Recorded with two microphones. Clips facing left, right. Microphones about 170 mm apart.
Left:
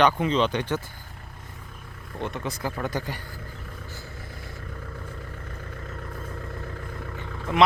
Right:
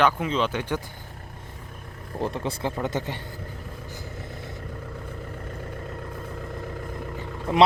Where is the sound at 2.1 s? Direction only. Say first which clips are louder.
Right 3 dB; 35° right (ahead or behind).